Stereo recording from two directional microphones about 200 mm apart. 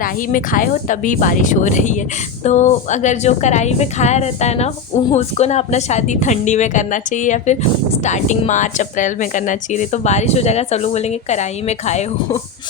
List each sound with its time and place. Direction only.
0.0 s a woman's voice: 45° left (ahead or behind)